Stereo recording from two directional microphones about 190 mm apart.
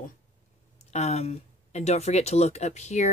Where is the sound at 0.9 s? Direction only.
35° left (ahead or behind).